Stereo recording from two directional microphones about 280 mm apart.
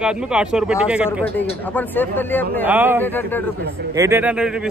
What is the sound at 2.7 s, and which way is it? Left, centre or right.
Speech, centre.